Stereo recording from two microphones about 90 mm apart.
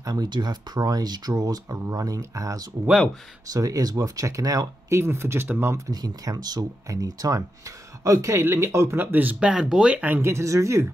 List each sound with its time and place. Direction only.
0.0 s speech: 45° right (ahead or behind); by 5.8 s 25° right (ahead or behind)
5.9 s speech: 45° right (ahead or behind)